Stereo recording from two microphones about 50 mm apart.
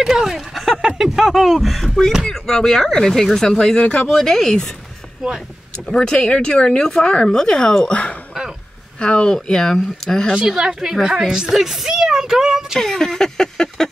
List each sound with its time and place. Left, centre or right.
0.0 s a woman's voice: centre
5.2 s a woman's voice: centre
5.9 s speech: centre
10.3 s a woman's voice: centre
12.7 s speech: centre